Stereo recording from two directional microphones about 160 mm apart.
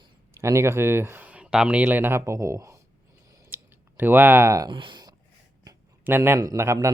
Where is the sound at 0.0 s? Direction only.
20° right (ahead or behind).